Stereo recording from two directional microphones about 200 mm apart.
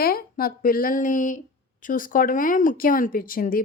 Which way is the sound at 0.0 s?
45° left (ahead or behind).